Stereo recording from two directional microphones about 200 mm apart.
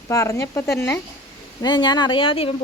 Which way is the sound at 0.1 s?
15° left (ahead or behind).